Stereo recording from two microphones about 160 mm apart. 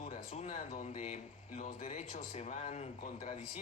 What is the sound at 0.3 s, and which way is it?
A man's voice, 40° left (ahead or behind).